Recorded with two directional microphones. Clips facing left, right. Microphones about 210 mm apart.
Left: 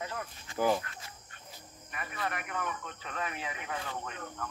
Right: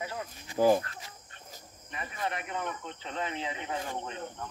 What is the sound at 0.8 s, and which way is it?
Speech, 30° right (ahead or behind).